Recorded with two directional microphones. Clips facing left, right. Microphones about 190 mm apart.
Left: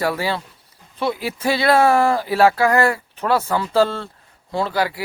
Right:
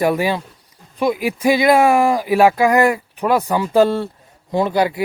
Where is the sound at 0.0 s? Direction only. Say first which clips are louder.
Right 5 dB; 15° right (ahead or behind).